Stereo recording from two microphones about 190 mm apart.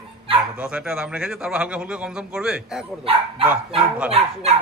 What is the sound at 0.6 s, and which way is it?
Speech, 5° right (ahead or behind).